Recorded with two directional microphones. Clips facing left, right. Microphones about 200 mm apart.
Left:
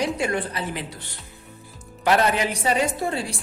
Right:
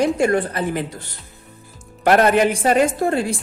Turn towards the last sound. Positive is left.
turn(degrees=-50)  # may be behind; listen again after turning